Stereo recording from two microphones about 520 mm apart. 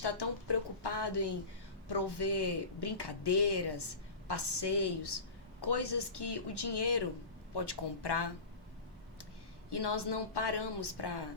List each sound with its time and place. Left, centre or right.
0.0 s a sound: left
1.9 s speech: left
9.6 s speech: left